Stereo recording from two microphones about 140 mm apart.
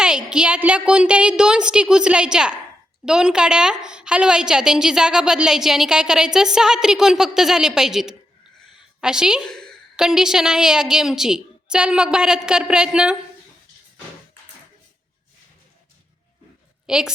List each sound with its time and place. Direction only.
0.0 s a woman's voice: 5° right (ahead or behind)
16.8 s a woman's voice: 5° right (ahead or behind)